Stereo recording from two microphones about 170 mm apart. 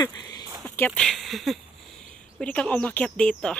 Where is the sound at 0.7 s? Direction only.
10° left (ahead or behind).